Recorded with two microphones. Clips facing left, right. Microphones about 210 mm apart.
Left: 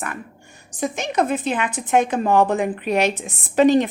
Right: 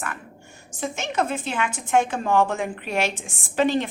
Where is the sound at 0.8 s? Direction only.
15° left (ahead or behind).